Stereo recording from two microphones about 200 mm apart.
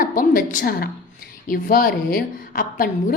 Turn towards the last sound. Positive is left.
turn(degrees=45)  # may be behind; listen again after turning